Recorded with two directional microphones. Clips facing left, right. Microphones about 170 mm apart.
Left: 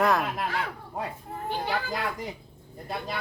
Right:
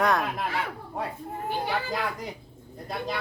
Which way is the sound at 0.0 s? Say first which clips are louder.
Even; centre (ahead or behind).